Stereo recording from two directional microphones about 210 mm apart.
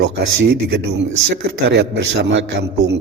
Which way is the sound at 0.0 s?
50° right (ahead or behind).